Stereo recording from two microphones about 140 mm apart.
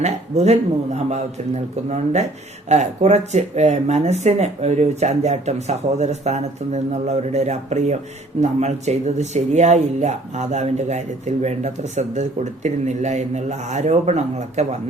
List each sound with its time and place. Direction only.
0.0 s speech: 55° right (ahead or behind)